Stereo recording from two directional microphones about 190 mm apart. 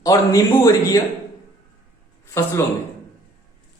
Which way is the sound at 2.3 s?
15° left (ahead or behind).